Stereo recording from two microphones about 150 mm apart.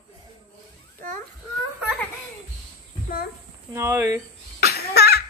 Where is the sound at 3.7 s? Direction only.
20° right (ahead or behind).